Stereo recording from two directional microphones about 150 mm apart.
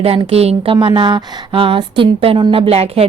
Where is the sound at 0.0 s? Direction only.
40° right (ahead or behind).